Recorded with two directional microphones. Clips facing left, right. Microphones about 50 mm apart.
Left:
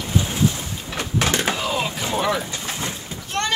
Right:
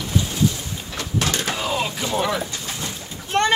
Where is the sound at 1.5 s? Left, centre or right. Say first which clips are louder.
Even; centre.